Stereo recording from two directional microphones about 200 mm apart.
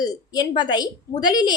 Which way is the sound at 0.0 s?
20° left (ahead or behind).